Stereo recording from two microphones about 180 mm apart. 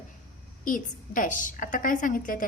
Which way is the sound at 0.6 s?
50° left (ahead or behind).